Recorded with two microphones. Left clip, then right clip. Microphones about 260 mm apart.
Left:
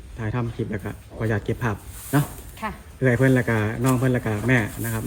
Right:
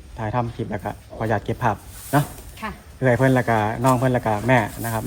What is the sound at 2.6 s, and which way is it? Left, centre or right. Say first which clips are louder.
Speech: left 1 dB; left.